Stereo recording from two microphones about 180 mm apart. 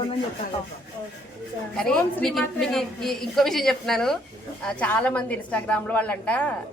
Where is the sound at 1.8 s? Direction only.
5° left (ahead or behind).